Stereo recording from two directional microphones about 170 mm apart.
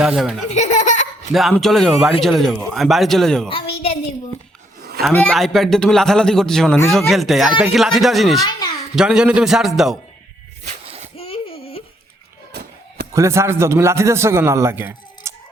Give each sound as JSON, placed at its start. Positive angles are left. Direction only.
{"t": 0.0, "sound": "speech", "side_deg": 0}
{"t": 0.5, "sound": "speech", "side_deg": 45}
{"t": 1.3, "sound": "speech", "side_deg": 0}
{"t": 4.8, "sound": "a sound", "side_deg": -65}
{"t": 5.1, "sound": "speech", "side_deg": 5}
{"t": 8.4, "sound": "a child's voice", "side_deg": 25}
{"t": 9.0, "sound": "speech", "side_deg": -5}
{"t": 10.7, "sound": "a sound", "side_deg": -40}
{"t": 11.2, "sound": "a sound", "side_deg": 35}
{"t": 13.1, "sound": "a man's voice", "side_deg": -15}